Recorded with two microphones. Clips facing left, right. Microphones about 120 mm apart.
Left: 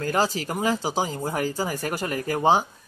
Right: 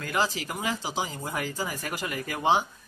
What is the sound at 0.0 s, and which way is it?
Speech, 40° left (ahead or behind).